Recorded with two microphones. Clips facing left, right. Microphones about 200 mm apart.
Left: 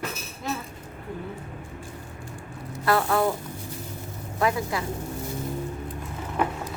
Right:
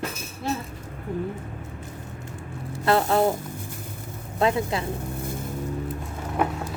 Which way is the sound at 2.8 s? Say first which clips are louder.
Right 2 dB; 25° right (ahead or behind).